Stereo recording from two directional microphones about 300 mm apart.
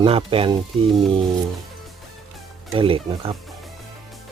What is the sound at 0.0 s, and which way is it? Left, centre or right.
Speech, centre.